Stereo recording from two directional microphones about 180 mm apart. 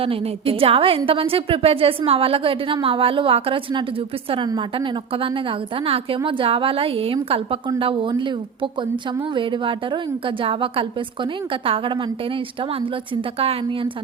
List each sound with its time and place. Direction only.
0.0 s a woman's voice: 30° right (ahead or behind)